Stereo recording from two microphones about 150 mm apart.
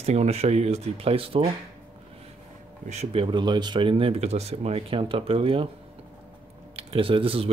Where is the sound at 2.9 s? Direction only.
40° right (ahead or behind).